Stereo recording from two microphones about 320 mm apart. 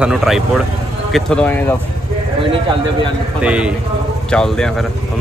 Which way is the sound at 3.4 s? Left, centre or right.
Centre.